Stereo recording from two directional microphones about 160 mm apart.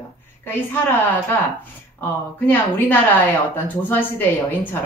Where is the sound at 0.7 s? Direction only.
15° left (ahead or behind).